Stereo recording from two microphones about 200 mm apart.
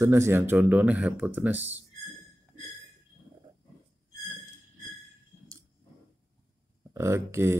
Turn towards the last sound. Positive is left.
turn(degrees=-15)  # may be behind; listen again after turning